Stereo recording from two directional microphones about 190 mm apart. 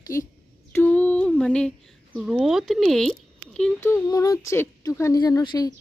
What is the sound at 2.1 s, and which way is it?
Speech, 5° right (ahead or behind).